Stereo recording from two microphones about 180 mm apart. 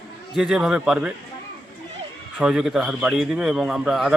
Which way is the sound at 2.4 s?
5° right (ahead or behind).